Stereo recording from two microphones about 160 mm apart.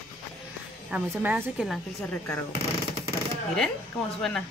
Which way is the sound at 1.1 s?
10° right (ahead or behind).